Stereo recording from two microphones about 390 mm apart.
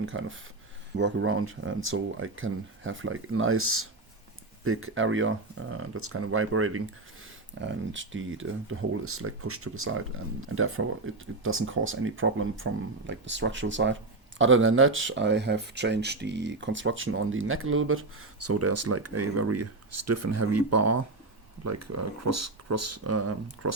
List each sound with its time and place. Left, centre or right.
0.0 s speech: right